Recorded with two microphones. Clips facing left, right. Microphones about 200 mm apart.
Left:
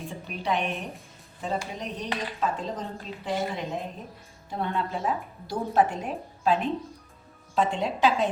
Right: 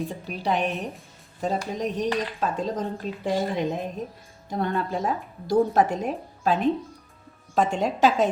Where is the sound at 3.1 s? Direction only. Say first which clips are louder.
Right 7 dB; 50° right (ahead or behind).